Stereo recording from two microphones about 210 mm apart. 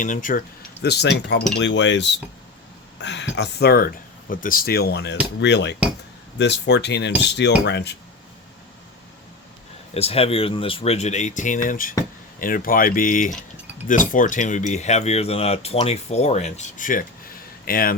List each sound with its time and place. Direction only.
0.0 s chink: 40° left (ahead or behind); by 1.5 s 55° left (ahead or behind)
1.5 s speech: 60° left (ahead or behind)
4.3 s chink: 40° left (ahead or behind)
5.4 s speech: 55° left (ahead or behind)
9.9 s speech: 30° left (ahead or behind)
17.7 s chink: 45° left (ahead or behind)